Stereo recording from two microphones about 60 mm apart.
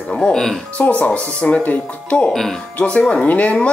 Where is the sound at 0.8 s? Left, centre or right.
Left.